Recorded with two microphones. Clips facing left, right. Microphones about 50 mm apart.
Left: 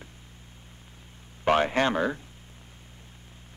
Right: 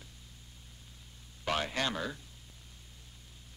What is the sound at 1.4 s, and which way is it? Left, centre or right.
Speech, left.